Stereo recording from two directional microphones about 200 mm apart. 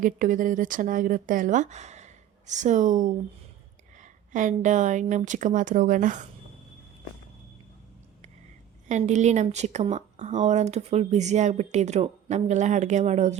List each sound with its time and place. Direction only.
0.0 s speech: 40° right (ahead or behind)
8.9 s speech: 35° right (ahead or behind)